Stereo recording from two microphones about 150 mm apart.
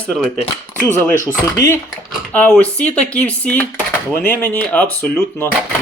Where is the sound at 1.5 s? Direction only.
20° left (ahead or behind).